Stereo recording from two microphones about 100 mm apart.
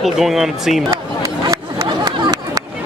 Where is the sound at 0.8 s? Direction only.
30° right (ahead or behind).